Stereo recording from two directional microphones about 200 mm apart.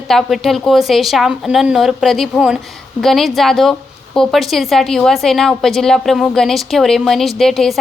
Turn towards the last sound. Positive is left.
turn(degrees=0)  # may be behind; listen again after turning